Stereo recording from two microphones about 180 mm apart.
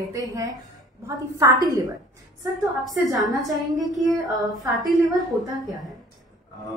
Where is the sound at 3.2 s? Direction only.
20° right (ahead or behind).